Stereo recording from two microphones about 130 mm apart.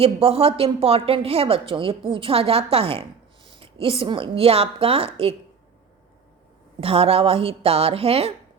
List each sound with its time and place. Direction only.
0.0 s speech: 50° right (ahead or behind)
3.5 s a sound: 45° right (ahead or behind)
4.0 s speech: 40° right (ahead or behind)
6.7 s speech: 45° right (ahead or behind)